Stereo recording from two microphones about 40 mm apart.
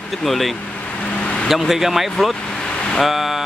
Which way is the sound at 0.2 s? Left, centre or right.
Centre.